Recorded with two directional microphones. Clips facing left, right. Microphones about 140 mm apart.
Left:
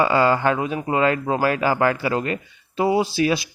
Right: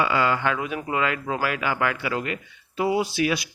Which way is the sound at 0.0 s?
35° left (ahead or behind).